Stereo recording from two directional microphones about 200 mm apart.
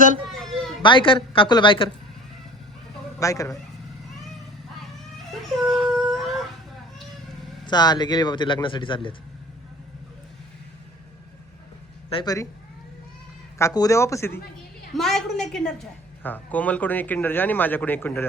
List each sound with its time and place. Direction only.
0.3 s a sound: centre (ahead or behind)
0.8 s speech: 25° left (ahead or behind)
3.2 s a woman's voice: 15° left (ahead or behind)
5.3 s dog: centre (ahead or behind)
7.7 s speech: 20° left (ahead or behind)
12.0 s speech: 20° left (ahead or behind)
13.6 s a woman's voice: 15° left (ahead or behind)
14.9 s a woman's voice: centre (ahead or behind)